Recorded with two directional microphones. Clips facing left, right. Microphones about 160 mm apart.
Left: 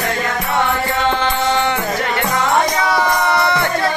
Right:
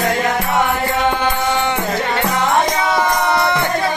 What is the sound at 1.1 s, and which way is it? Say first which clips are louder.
Music: left 1 dB; 15° right (ahead or behind).